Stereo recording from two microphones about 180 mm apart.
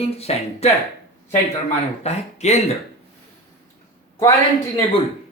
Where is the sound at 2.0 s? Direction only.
40° left (ahead or behind).